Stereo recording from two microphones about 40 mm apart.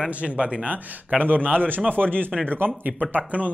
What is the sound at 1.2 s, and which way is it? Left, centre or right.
A man's voice, right.